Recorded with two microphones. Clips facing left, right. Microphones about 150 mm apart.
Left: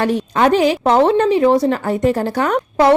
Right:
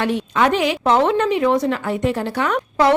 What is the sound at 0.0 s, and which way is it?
A woman's voice, 40° left (ahead or behind).